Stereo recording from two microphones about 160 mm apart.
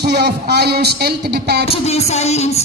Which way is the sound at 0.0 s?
90° right.